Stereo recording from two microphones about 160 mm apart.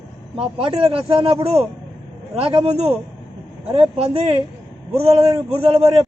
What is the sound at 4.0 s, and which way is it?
Speech, 40° right (ahead or behind).